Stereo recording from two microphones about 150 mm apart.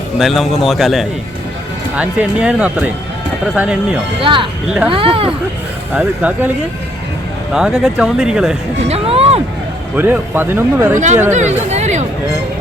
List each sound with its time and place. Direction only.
0.2 s speech: centre (ahead or behind)
4.2 s speech: 35° right (ahead or behind)
5.9 s speech: centre (ahead or behind)
7.5 s speech: 5° right (ahead or behind)
8.9 s speech: 40° right (ahead or behind)
9.9 s speech: 10° right (ahead or behind)
10.9 s speech: 50° right (ahead or behind)